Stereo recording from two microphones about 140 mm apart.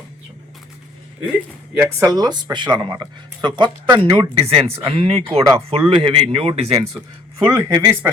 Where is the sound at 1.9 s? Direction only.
25° right (ahead or behind); by 6.8 s 45° right (ahead or behind).